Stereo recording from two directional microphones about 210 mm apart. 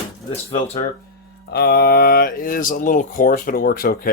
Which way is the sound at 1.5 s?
50° left (ahead or behind).